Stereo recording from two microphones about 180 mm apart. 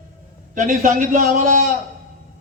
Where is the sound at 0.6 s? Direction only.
45° right (ahead or behind).